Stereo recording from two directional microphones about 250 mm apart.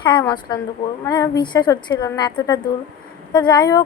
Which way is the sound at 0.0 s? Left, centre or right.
Centre.